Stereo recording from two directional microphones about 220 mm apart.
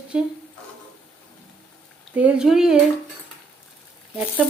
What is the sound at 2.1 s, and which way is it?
Speech, 5° right (ahead or behind).